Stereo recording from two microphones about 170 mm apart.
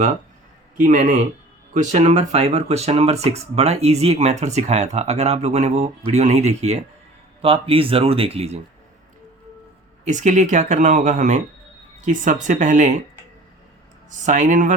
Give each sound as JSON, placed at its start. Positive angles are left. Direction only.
{"t": 0.8, "sound": "speech", "side_deg": -45}
{"t": 10.0, "sound": "speech", "side_deg": -45}
{"t": 14.3, "sound": "speech", "side_deg": -45}